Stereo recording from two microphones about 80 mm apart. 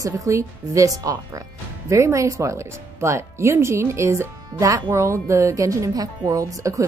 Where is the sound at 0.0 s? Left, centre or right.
Right.